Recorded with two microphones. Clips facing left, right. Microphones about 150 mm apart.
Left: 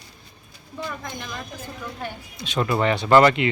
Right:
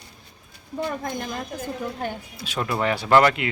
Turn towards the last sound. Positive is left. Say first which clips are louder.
# left 2 dB
turn(degrees=-5)  # may be behind; listen again after turning